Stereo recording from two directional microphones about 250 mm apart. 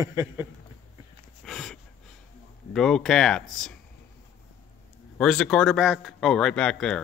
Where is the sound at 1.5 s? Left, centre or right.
Centre.